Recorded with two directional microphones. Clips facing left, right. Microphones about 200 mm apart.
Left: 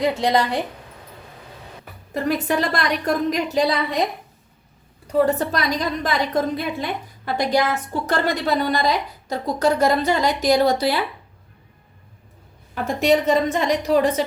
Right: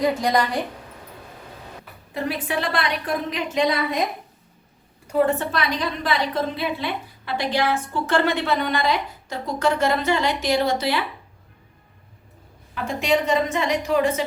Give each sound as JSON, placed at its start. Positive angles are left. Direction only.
{"t": 0.2, "sound": "a woman's voice", "side_deg": 25}
{"t": 1.8, "sound": "a woman's voice", "side_deg": 45}
{"t": 5.0, "sound": "a woman's voice", "side_deg": 35}
{"t": 12.7, "sound": "a woman's voice", "side_deg": 45}